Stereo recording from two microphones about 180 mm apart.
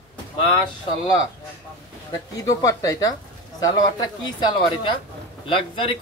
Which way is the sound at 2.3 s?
20° left (ahead or behind).